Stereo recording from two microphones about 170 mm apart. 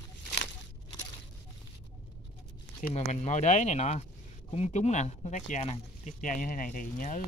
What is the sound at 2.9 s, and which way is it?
Speech, 40° left (ahead or behind).